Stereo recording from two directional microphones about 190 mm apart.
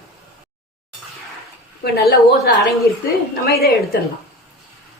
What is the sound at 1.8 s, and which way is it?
A woman's voice, 55° left (ahead or behind).